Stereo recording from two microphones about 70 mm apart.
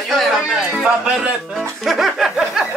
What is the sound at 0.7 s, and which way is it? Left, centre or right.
Music, centre.